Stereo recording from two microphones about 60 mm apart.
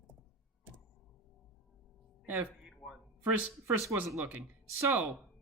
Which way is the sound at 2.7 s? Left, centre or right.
Centre.